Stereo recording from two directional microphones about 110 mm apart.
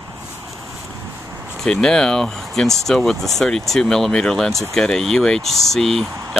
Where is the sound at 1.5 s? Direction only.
5° left (ahead or behind).